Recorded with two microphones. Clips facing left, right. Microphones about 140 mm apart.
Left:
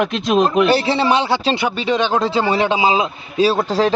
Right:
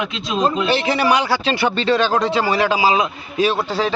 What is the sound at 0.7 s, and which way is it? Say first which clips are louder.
Speech: left 2 dB; 35° left (ahead or behind).